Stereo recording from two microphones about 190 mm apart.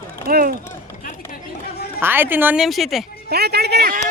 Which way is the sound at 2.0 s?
10° right (ahead or behind).